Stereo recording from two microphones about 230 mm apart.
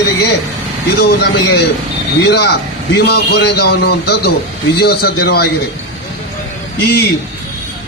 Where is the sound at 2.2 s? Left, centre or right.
Left.